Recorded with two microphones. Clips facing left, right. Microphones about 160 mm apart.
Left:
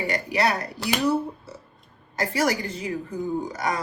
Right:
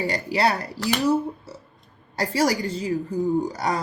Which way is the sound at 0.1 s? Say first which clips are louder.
Left 1 dB; 30° right (ahead or behind).